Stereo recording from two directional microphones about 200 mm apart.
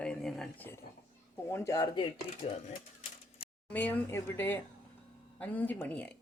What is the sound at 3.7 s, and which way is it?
Speech, 10° left (ahead or behind).